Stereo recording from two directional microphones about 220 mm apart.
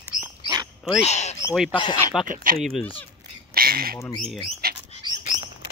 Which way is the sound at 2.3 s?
40° right (ahead or behind).